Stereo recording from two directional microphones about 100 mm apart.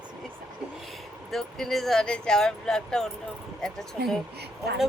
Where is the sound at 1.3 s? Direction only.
Centre (ahead or behind).